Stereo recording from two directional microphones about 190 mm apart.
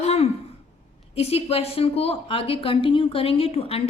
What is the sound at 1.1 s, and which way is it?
A woman's voice, 35° left (ahead or behind).